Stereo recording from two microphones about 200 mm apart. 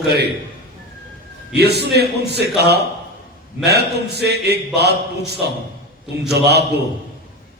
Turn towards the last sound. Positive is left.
turn(degrees=-55)  # may be behind; listen again after turning